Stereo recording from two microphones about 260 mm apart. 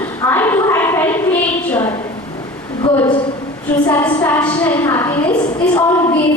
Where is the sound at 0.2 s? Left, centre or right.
Centre.